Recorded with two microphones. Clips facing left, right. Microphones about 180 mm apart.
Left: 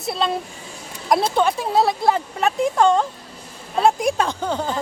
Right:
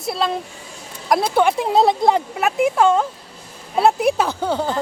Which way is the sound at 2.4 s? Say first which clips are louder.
Right 1 dB; 5° right (ahead or behind).